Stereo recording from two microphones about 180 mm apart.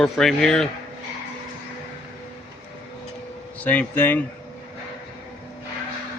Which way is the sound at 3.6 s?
10° left (ahead or behind).